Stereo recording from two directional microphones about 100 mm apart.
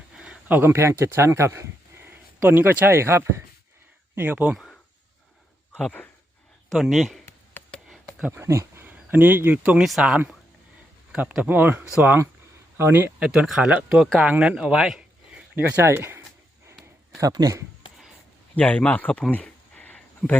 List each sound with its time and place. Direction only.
0.1 s speech: 10° right (ahead or behind); by 3.4 s 25° right (ahead or behind)
4.1 s speech: 15° right (ahead or behind)
4.5 s a sound: 5° left (ahead or behind)
5.7 s speech: 15° left (ahead or behind)
6.7 s speech: centre (ahead or behind)
7.6 s a sound: 20° left (ahead or behind)
8.3 s speech: 30° right (ahead or behind)
9.8 s speech: 5° right (ahead or behind); by 13.2 s 20° right (ahead or behind)
13.2 s speech: 5° right (ahead or behind)
15.5 s speech: 25° right (ahead or behind)
17.3 s speech: 35° right (ahead or behind)
18.5 s speech: 10° left (ahead or behind)
19.3 s a sound: 15° left (ahead or behind)